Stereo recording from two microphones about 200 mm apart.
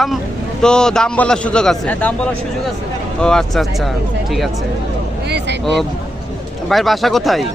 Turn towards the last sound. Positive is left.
turn(degrees=0)  # may be behind; listen again after turning